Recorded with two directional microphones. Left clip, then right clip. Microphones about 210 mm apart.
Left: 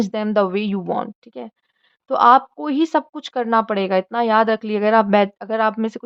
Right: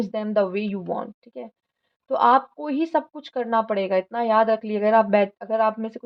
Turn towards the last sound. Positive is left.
turn(degrees=30)  # may be behind; listen again after turning